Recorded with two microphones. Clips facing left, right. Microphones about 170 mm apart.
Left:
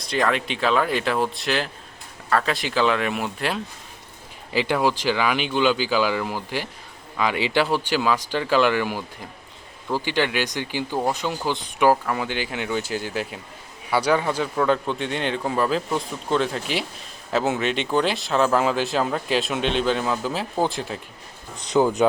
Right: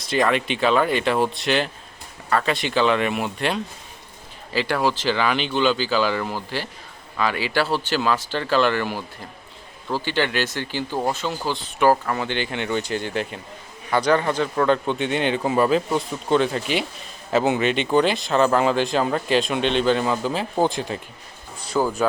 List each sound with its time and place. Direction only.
0.0 s speech: centre (ahead or behind)
4.5 s speech: 15° left (ahead or behind); by 21.0 s centre (ahead or behind)
21.7 s speech: 20° left (ahead or behind)